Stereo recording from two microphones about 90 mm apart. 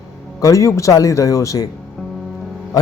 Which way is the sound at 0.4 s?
35° left (ahead or behind).